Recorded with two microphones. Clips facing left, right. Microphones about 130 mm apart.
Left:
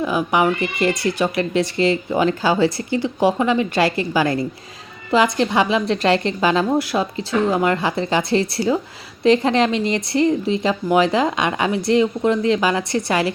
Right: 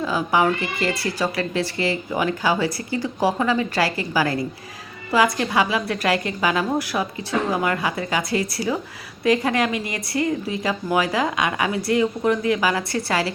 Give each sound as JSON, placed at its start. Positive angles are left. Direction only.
{"t": 0.0, "sound": "speech", "side_deg": 20}